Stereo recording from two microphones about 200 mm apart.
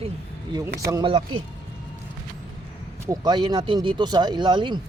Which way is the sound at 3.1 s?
20° right (ahead or behind).